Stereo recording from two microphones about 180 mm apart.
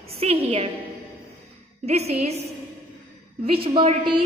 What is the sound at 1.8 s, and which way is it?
Speech, 35° right (ahead or behind).